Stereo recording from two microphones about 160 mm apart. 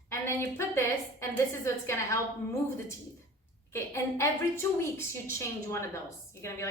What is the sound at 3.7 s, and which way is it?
A woman's voice, 15° left (ahead or behind).